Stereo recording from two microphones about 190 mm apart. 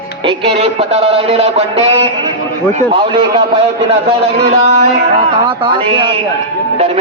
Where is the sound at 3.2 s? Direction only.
25° right (ahead or behind).